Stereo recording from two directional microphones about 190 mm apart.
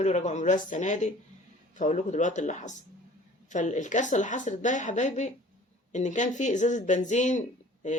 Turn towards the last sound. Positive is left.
turn(degrees=40)  # may be behind; listen again after turning